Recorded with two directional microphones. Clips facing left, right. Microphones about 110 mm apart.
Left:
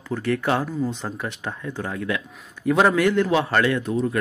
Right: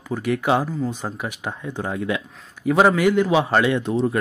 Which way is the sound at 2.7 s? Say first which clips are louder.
Right 2 dB; 5° right (ahead or behind).